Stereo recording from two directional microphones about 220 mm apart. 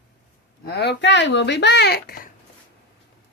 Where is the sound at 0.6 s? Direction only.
50° left (ahead or behind).